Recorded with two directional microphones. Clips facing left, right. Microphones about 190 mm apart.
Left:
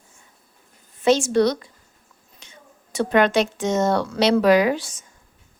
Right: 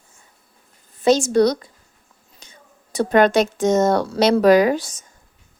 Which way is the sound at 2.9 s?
40° right (ahead or behind).